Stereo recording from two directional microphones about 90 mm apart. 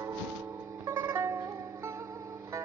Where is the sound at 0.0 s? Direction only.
40° right (ahead or behind).